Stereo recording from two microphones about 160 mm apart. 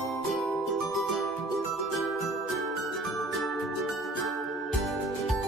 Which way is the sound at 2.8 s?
Centre (ahead or behind).